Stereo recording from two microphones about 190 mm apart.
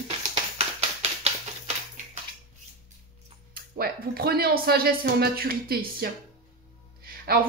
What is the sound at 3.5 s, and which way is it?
Speech, 50° right (ahead or behind).